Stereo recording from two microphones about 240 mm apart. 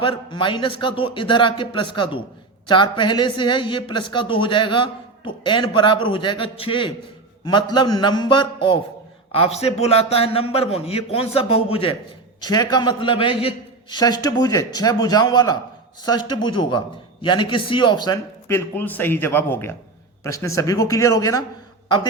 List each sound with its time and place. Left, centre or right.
0.0 s a woman's voice: left